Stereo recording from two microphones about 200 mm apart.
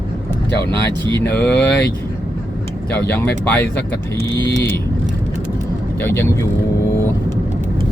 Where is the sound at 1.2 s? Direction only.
10° left (ahead or behind).